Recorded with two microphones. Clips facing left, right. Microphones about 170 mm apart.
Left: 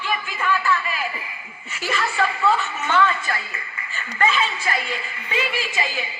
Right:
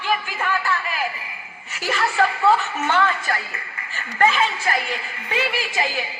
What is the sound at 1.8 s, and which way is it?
A woman's voice, 50° right (ahead or behind).